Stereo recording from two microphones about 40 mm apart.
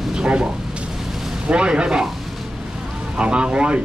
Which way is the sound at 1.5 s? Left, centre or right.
Right.